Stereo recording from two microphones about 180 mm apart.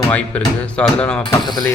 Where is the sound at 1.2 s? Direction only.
25° left (ahead or behind).